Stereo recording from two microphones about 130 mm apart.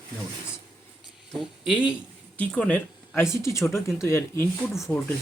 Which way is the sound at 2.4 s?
10° left (ahead or behind).